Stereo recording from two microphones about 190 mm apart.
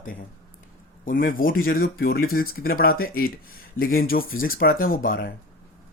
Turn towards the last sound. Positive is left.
turn(degrees=50)  # may be behind; listen again after turning